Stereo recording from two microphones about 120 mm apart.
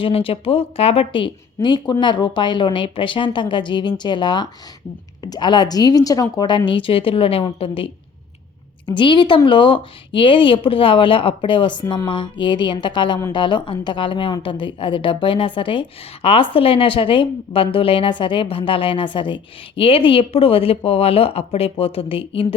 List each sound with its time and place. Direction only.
0.0 s speech: 50° left (ahead or behind)
6.7 s a woman's voice: 45° left (ahead or behind)
8.9 s a woman's voice: 40° left (ahead or behind)